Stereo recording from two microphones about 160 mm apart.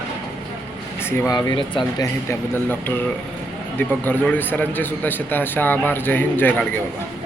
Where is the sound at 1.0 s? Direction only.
15° left (ahead or behind).